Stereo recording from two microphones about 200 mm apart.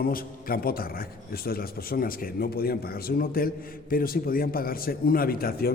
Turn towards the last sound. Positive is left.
turn(degrees=50)  # may be behind; listen again after turning